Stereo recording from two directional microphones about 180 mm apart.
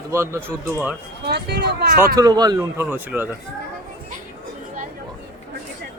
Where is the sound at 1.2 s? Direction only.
65° right (ahead or behind).